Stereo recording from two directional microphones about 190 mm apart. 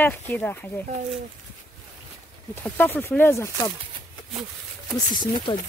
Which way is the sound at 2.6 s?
10° left (ahead or behind).